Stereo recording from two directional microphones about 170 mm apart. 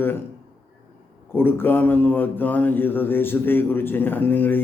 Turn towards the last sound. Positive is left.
turn(degrees=10)  # may be behind; listen again after turning